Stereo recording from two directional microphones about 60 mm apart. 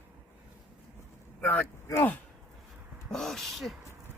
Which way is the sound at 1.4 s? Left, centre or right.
Centre.